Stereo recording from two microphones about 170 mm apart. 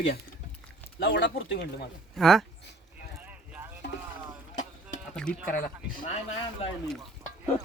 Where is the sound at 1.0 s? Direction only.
90° left.